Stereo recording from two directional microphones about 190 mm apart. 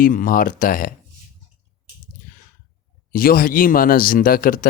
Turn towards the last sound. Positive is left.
turn(degrees=50)  # may be behind; listen again after turning